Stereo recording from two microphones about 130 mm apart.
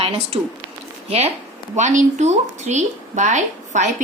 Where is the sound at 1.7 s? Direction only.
70° right (ahead or behind).